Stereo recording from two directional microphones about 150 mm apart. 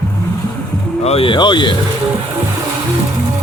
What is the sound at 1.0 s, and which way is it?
Speech, 40° left (ahead or behind).